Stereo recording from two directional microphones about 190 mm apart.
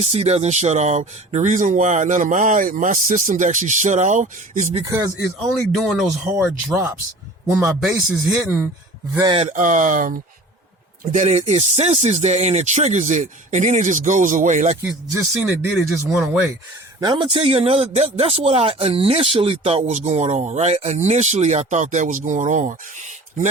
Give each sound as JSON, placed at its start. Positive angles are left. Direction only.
{"t": 0.0, "sound": "a man's voice", "side_deg": -35}
{"t": 4.8, "sound": "speech", "side_deg": -15}
{"t": 5.7, "sound": "a man's voice", "side_deg": 0}
{"t": 9.4, "sound": "a man's voice", "side_deg": -40}
{"t": 14.8, "sound": "speech", "side_deg": -10}
{"t": 17.0, "sound": "a man's voice", "side_deg": -25}